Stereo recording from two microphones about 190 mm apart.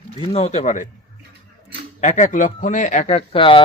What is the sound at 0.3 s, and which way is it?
Speech, 35° left (ahead or behind).